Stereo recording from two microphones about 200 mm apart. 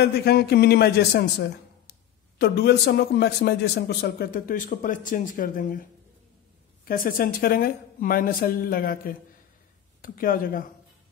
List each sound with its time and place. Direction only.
0.0 s a man's voice: 55° left (ahead or behind)